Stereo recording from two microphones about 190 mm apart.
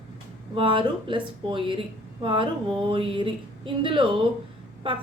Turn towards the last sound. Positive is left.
turn(degrees=-25)  # may be behind; listen again after turning